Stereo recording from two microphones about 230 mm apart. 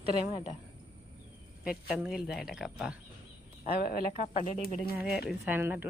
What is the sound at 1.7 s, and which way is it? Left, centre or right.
Speech, centre.